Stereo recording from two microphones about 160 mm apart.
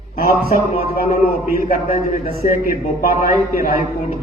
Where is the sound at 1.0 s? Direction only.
60° left (ahead or behind).